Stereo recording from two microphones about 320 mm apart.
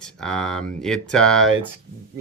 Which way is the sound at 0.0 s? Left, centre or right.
Centre.